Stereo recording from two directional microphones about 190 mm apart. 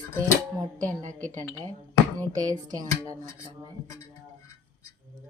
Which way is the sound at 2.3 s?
20° right (ahead or behind).